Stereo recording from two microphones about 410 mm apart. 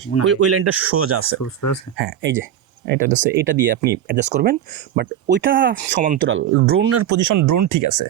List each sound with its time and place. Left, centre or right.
0.3 s speech: right
1.5 s speech: left
2.0 s speech: right